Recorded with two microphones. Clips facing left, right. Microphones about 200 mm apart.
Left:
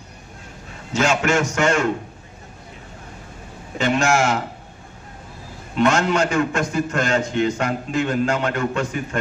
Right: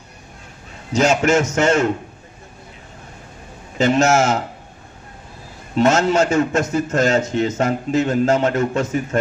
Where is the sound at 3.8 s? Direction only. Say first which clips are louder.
Right 4 dB; 40° right (ahead or behind).